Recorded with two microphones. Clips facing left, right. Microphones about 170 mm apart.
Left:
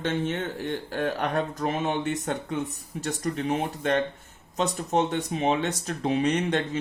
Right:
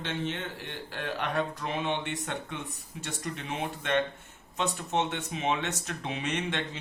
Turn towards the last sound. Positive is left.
turn(degrees=40)  # may be behind; listen again after turning